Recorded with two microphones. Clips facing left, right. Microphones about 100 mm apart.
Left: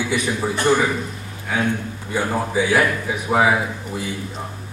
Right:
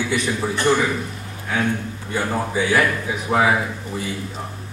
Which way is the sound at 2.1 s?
5° left (ahead or behind).